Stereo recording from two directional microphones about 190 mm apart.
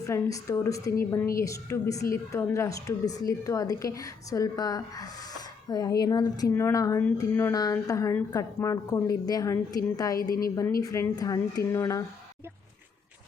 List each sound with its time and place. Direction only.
0.0 s a woman's voice: 15° left (ahead or behind)